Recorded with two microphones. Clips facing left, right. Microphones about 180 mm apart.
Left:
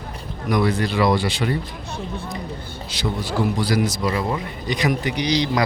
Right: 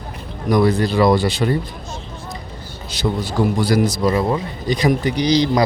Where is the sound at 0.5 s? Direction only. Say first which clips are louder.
Right 5 dB; 35° right (ahead or behind).